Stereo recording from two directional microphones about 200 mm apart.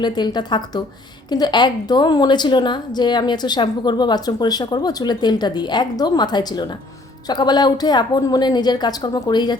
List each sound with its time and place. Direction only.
0.0 s a woman's voice: 20° left (ahead or behind)